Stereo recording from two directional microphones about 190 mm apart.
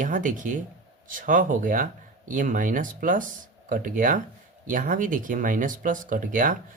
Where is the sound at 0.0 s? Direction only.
45° right (ahead or behind).